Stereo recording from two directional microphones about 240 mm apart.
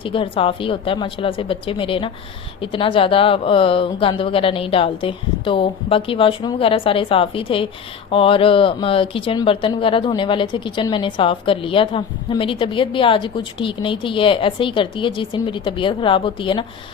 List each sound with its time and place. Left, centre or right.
0.0 s speech: left